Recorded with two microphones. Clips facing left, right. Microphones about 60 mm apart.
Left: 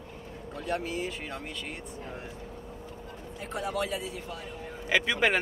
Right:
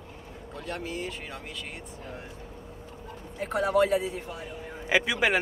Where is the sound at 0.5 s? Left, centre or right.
Centre.